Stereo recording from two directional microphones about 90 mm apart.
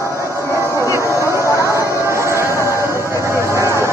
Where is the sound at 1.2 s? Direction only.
30° right (ahead or behind).